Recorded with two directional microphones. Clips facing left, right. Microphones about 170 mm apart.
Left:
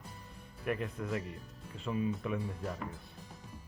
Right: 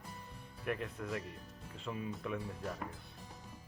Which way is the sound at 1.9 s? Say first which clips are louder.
Left 6 dB; 25° left (ahead or behind).